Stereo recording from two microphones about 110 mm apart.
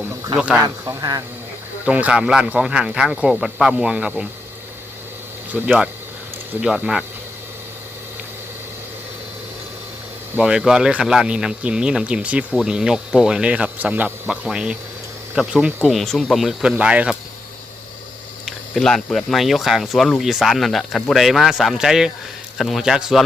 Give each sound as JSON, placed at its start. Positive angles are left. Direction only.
{"t": 0.3, "sound": "speech", "side_deg": -10}
{"t": 0.6, "sound": "a man's voice", "side_deg": -30}
{"t": 1.8, "sound": "speech", "side_deg": -10}
{"t": 5.5, "sound": "speech", "side_deg": -15}
{"t": 10.3, "sound": "speech", "side_deg": -10}
{"t": 18.4, "sound": "speech", "side_deg": 5}